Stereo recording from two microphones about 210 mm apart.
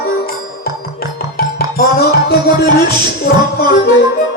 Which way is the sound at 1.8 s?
50° left (ahead or behind).